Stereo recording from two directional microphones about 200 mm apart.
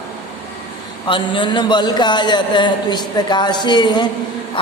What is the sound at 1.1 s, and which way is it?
A man's voice, 25° left (ahead or behind).